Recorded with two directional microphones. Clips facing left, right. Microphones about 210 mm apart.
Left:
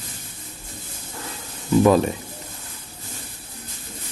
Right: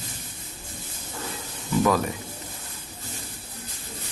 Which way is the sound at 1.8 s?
25° left (ahead or behind).